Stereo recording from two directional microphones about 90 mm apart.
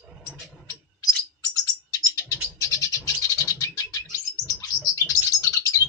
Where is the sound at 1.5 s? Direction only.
35° left (ahead or behind).